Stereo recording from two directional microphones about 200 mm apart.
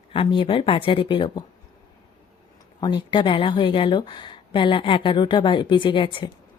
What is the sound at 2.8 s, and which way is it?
Speech, 25° left (ahead or behind).